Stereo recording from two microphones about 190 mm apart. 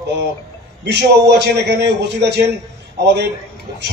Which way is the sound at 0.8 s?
65° right (ahead or behind).